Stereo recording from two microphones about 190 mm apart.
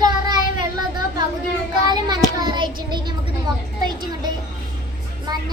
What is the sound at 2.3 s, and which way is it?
Child singing, 20° right (ahead or behind).